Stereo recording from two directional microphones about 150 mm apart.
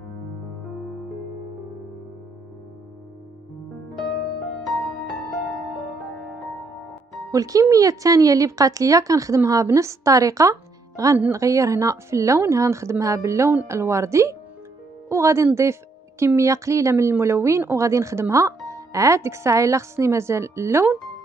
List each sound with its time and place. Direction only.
7.2 s a woman's voice: 25° right (ahead or behind)